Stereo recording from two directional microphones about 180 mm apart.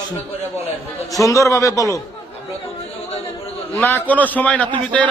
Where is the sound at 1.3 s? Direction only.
15° left (ahead or behind).